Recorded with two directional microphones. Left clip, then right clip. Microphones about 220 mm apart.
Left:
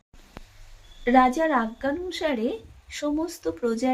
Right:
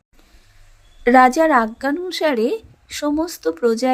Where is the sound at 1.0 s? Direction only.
40° right (ahead or behind).